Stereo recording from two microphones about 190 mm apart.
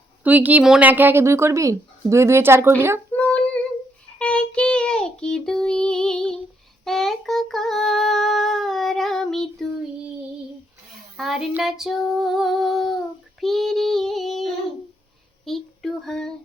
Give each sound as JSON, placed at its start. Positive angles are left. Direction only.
{"t": 0.3, "sound": "a woman's voice", "side_deg": -10}
{"t": 3.1, "sound": "female singing", "side_deg": 5}
{"t": 4.2, "sound": "child singing", "side_deg": 5}
{"t": 11.2, "sound": "female singing", "side_deg": 0}
{"t": 13.4, "sound": "child singing", "side_deg": 0}